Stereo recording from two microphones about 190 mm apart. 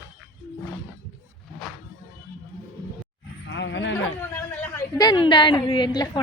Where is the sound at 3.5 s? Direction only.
70° left (ahead or behind).